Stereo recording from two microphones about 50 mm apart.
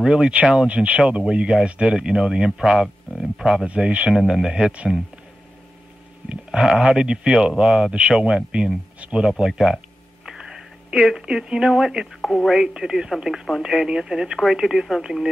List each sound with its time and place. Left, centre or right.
0.0 s speech: centre
0.7 s speech: right; by 3.6 s centre
3.6 s speech: right
4.1 s speech: centre
6.5 s speech: centre; by 9.2 s right
9.4 s speech: centre
10.2 s a sound: centre
11.2 s speech: centre
12.2 s telephone: centre
12.4 s speech: centre